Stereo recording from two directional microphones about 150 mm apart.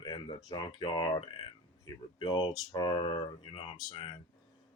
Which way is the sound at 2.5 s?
25° left (ahead or behind).